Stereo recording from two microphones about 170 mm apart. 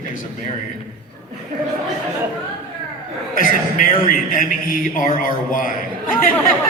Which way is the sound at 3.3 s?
55° left (ahead or behind).